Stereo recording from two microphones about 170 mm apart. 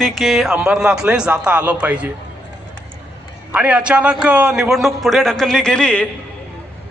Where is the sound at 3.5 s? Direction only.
5° right (ahead or behind).